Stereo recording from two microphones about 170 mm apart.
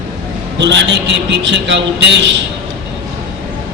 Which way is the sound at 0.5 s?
90° right.